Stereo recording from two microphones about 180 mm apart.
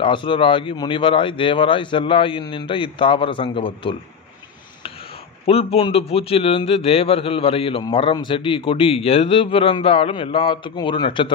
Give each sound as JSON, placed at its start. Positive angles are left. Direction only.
{"t": 0.0, "sound": "speech", "side_deg": 25}
{"t": 5.5, "sound": "a man's voice", "side_deg": 35}